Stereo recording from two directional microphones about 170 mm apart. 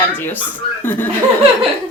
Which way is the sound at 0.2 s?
10° left (ahead or behind).